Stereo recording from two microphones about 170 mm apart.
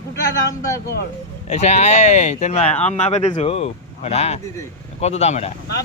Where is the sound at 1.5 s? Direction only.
40° left (ahead or behind).